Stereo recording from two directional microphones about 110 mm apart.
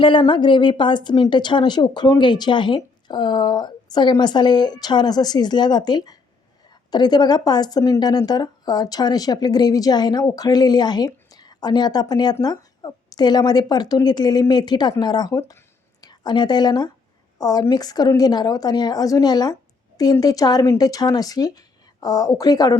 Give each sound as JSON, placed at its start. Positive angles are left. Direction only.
{"t": 0.0, "sound": "speech", "side_deg": 50}